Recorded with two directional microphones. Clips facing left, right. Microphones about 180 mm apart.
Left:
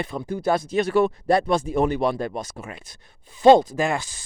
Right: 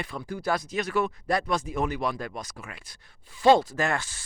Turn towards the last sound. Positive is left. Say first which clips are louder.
# left 4 dB
turn(degrees=15)  # may be behind; listen again after turning